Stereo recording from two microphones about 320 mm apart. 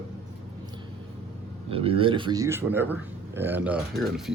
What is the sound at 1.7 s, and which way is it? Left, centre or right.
A man's voice, centre.